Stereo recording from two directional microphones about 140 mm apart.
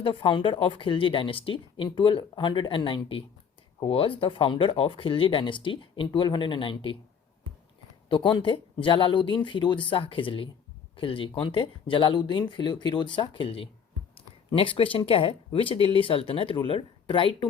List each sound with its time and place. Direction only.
0.0 s speech: 40° left (ahead or behind)
8.1 s speech: 35° left (ahead or behind)